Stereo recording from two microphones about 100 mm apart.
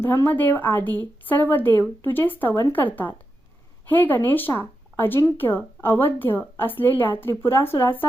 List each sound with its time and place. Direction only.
0.0 s speech: 25° left (ahead or behind)